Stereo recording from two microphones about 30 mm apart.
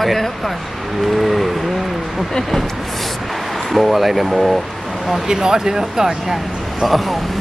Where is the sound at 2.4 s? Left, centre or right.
Centre.